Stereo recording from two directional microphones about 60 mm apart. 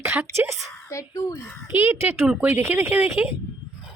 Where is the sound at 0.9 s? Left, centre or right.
Left.